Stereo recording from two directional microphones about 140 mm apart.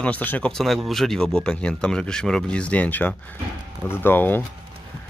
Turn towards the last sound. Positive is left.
turn(degrees=15)  # may be behind; listen again after turning